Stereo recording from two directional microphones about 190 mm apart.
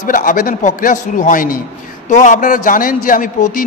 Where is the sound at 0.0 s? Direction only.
45° left (ahead or behind).